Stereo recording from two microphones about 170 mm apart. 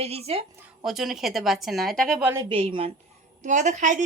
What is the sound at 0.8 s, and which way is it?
Speech, centre (ahead or behind).